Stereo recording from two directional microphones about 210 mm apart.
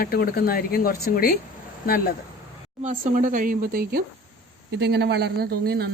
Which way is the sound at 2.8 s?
35° right (ahead or behind).